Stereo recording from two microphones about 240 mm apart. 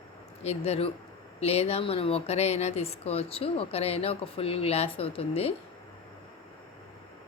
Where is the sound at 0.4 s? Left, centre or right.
Left.